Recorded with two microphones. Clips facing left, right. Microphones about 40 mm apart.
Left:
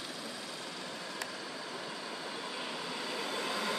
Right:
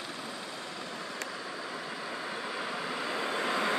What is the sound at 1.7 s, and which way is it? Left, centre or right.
Vehicle, right.